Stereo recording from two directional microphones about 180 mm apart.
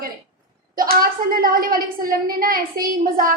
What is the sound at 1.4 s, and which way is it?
A woman's voice, 50° right (ahead or behind).